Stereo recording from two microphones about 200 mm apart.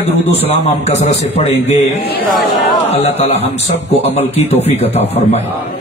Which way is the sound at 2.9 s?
30° left (ahead or behind).